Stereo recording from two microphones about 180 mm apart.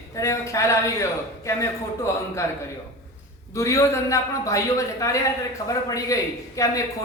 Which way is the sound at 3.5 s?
15° left (ahead or behind).